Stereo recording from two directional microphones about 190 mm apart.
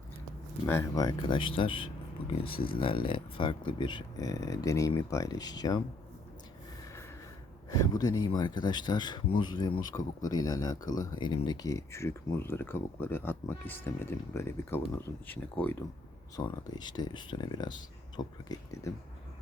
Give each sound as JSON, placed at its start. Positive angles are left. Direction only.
{"t": 0.7, "sound": "speech", "side_deg": 15}
{"t": 7.7, "sound": "speech", "side_deg": 20}
{"t": 16.3, "sound": "speech", "side_deg": 20}